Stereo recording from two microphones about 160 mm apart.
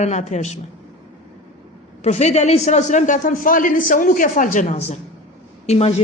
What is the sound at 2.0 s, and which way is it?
A man's voice, 45° left (ahead or behind).